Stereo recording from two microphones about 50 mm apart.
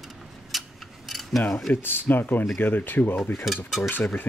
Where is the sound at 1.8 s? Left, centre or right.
Left.